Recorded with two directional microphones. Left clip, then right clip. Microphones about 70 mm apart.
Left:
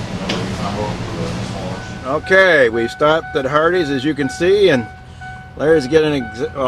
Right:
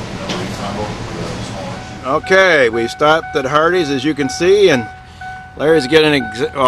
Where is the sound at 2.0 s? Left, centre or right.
Right.